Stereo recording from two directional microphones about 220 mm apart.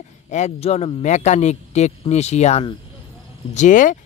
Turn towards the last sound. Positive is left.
turn(degrees=35)  # may be behind; listen again after turning